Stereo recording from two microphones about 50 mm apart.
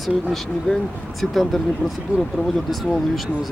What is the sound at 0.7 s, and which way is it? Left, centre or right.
Speech, left.